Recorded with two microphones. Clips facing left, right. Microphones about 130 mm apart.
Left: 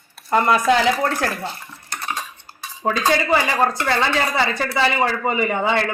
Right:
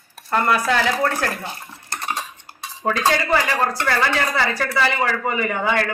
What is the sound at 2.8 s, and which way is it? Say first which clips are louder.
Speech: left 1 dB; 25° left (ahead or behind).